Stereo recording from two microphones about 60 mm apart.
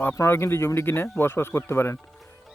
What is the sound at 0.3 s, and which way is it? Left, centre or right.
Speech, left.